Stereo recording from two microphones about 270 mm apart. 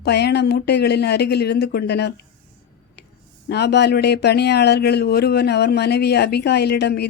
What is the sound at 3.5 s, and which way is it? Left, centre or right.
Speech, left.